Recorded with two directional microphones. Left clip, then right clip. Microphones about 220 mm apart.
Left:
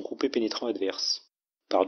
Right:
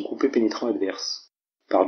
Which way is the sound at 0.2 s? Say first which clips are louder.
Right 6 dB; 30° left (ahead or behind).